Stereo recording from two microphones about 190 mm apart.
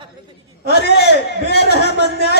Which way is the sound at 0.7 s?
60° left (ahead or behind).